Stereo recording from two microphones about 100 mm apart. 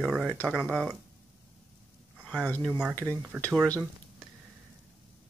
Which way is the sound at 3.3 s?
10° right (ahead or behind).